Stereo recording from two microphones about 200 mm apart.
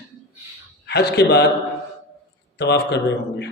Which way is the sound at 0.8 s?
55° left (ahead or behind).